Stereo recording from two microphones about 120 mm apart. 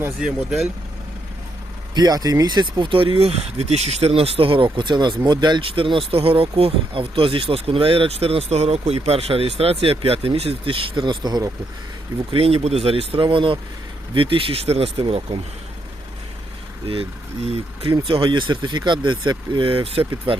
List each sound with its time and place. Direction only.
0.2 s speech: 5° right (ahead or behind)
2.0 s speech: 35° right (ahead or behind)
12.3 s speech: 55° right (ahead or behind)
16.8 s speech: 50° right (ahead or behind)
18.0 s speech: 45° right (ahead or behind)